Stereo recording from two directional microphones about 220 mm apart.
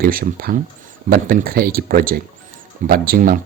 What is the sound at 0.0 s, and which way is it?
Speech, 40° right (ahead or behind).